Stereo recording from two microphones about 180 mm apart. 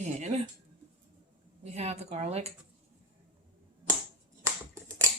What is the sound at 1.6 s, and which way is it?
Speech, 35° right (ahead or behind).